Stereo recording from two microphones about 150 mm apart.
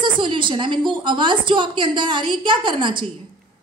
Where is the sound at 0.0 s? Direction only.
30° right (ahead or behind).